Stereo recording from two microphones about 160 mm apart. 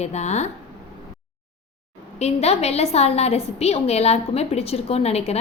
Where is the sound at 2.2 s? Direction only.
40° left (ahead or behind).